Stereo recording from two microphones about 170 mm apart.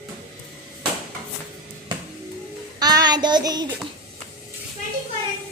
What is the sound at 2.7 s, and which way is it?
Child singing, 25° right (ahead or behind).